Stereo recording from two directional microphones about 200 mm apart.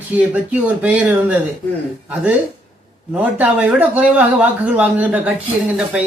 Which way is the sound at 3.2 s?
5° right (ahead or behind).